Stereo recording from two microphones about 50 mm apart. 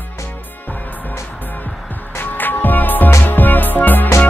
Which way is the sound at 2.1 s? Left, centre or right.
Left.